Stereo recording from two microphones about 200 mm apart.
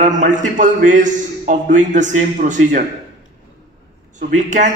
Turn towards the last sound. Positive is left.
turn(degrees=-40)  # may be behind; listen again after turning